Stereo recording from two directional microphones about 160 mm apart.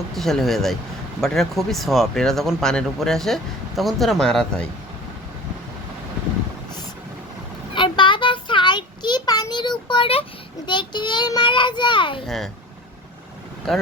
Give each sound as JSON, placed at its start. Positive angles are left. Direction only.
{"t": 0.1, "sound": "speech", "side_deg": 0}
{"t": 7.8, "sound": "child singing", "side_deg": 30}
{"t": 13.7, "sound": "speech", "side_deg": 0}